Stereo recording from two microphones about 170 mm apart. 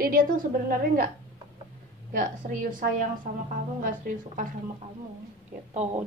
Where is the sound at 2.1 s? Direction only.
55° right (ahead or behind).